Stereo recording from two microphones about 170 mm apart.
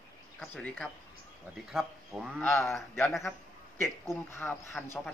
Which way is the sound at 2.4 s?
15° left (ahead or behind).